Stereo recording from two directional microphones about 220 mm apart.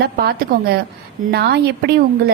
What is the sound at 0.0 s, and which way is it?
A woman's voice, 45° right (ahead or behind).